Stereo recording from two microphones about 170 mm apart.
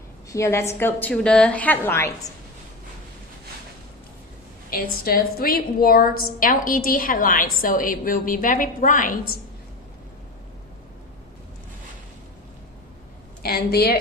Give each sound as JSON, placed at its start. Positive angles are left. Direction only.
{"t": 0.3, "sound": "a woman's voice", "side_deg": 15}
{"t": 4.7, "sound": "a woman's voice", "side_deg": 60}
{"t": 13.4, "sound": "a woman's voice", "side_deg": 70}